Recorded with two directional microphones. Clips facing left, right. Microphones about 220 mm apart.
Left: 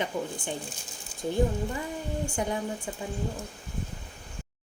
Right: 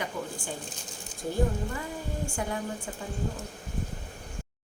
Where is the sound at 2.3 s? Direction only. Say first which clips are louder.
Left 3 dB; 20° left (ahead or behind).